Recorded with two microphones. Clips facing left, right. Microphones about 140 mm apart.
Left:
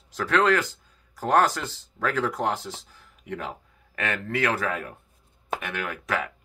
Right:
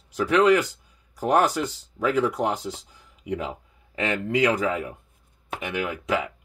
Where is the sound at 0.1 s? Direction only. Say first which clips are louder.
Right 3 dB; 15° right (ahead or behind).